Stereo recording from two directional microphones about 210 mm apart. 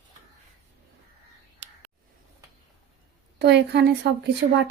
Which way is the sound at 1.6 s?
60° right (ahead or behind).